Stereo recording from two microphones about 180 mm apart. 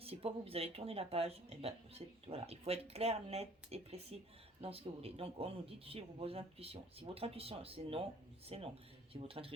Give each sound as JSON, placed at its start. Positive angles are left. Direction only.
{"t": 0.0, "sound": "speech", "side_deg": -35}